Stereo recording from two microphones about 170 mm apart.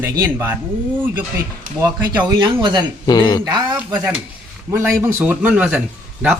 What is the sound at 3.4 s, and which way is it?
Speech, 20° right (ahead or behind).